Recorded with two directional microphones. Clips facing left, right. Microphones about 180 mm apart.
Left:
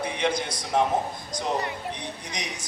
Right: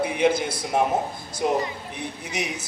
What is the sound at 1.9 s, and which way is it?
Speech, 5° right (ahead or behind).